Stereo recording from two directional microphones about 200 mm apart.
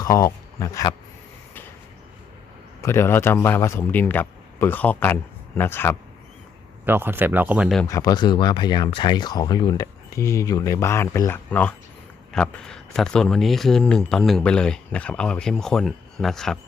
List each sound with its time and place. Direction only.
0.0 s speech: 15° left (ahead or behind)
2.8 s a man's voice: 15° left (ahead or behind)
6.8 s speech: 10° right (ahead or behind)
7.9 s speech: 15° left (ahead or behind); by 16.6 s centre (ahead or behind)